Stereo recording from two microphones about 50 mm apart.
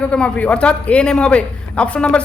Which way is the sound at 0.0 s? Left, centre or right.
Left.